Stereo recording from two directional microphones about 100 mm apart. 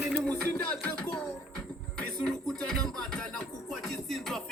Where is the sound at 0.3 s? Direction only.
10° left (ahead or behind).